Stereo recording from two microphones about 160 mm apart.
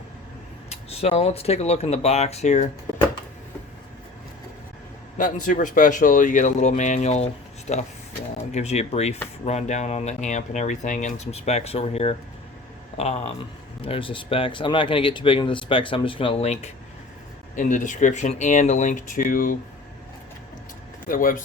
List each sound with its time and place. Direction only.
0.7 s speech: 40° left (ahead or behind)
5.1 s speech: 55° left (ahead or behind)
21.1 s speech: 60° left (ahead or behind)